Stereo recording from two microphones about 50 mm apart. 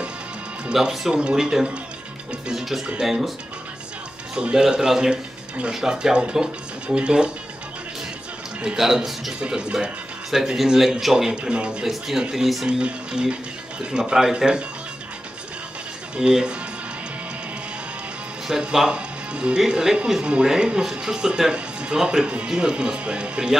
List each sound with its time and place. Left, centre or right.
0.7 s speech: centre
3.0 s speech: centre
4.4 s speech: centre
8.6 s a man's voice: centre
9.4 s speech: centre
12.6 s speech: centre
16.2 s speech: centre
18.5 s speech: centre